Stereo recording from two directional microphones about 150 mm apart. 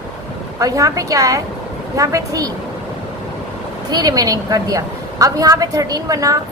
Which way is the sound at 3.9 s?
25° right (ahead or behind).